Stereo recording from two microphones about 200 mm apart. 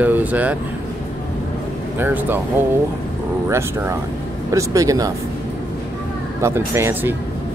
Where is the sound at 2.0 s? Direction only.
10° right (ahead or behind).